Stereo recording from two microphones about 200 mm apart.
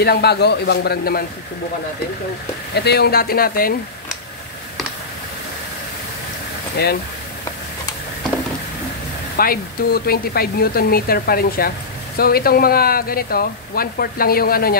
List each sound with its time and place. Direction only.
0.0 s speech: 55° left (ahead or behind)
2.7 s speech: 55° left (ahead or behind)
6.8 s speech: 55° left (ahead or behind)
9.4 s speech: 50° left (ahead or behind)